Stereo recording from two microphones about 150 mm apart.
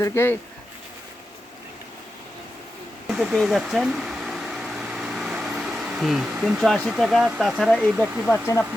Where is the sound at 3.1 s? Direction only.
Centre (ahead or behind).